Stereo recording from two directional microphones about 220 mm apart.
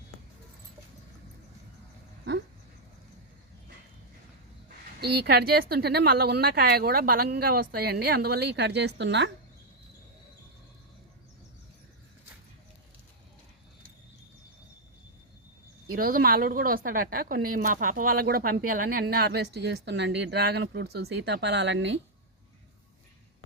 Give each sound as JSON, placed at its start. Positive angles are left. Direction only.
{"t": 4.9, "sound": "speech", "side_deg": -50}
{"t": 15.9, "sound": "speech", "side_deg": -40}